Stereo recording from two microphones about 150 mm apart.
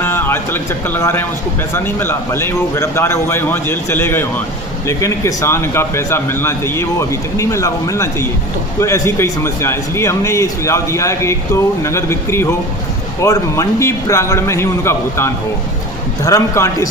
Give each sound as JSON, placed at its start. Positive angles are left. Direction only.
{"t": 0.0, "sound": "a man's voice", "side_deg": 15}